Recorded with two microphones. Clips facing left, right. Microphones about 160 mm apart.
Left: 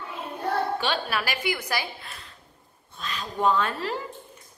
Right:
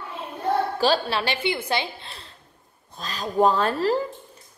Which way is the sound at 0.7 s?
30° right (ahead or behind).